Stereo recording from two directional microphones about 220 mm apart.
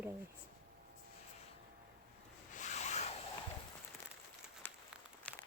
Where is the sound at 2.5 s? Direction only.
30° left (ahead or behind).